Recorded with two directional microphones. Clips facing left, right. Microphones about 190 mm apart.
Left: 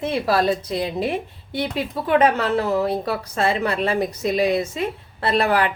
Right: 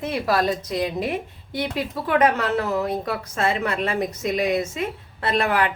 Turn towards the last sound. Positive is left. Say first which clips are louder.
# left 2 dB
turn(degrees=35)  # may be behind; listen again after turning